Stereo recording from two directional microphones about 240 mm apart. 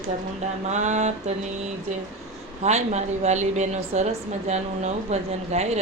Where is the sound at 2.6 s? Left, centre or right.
Right.